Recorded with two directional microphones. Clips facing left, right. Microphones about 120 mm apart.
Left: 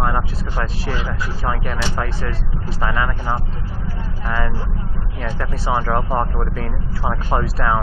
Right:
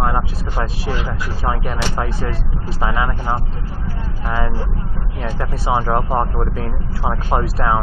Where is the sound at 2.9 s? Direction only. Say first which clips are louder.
Right 1 dB; 25° right (ahead or behind).